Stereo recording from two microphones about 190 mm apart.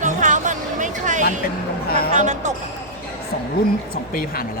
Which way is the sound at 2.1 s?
40° right (ahead or behind).